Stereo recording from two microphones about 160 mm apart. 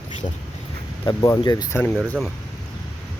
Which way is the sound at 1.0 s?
25° left (ahead or behind).